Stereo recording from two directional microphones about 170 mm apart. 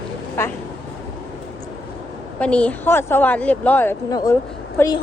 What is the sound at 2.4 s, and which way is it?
A woman's voice, 5° left (ahead or behind).